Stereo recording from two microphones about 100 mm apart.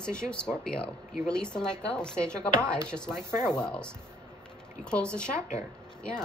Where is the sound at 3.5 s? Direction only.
10° left (ahead or behind).